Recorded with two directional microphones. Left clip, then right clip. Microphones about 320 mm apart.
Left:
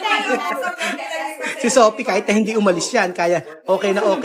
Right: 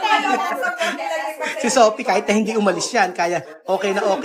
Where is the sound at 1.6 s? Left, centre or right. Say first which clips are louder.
Left 1 dB; centre.